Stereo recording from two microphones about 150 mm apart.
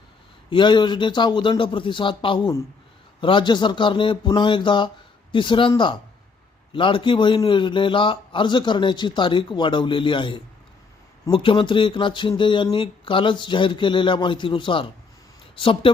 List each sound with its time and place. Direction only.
0.5 s a man's voice: 30° left (ahead or behind)